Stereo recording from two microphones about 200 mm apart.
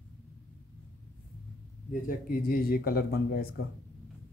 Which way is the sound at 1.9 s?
45° left (ahead or behind).